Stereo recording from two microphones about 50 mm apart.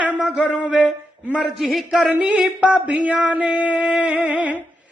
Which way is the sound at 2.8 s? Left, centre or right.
Right.